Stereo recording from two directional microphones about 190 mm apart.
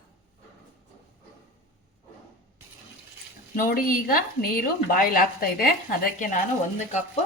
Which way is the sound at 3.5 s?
50° left (ahead or behind).